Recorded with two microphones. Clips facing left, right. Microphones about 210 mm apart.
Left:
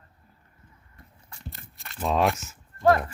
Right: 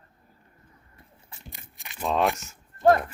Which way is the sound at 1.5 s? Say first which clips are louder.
Left 1 dB; 15° right (ahead or behind).